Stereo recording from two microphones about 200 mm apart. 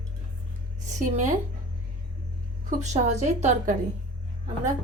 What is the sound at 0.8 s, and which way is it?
Speech, 35° right (ahead or behind).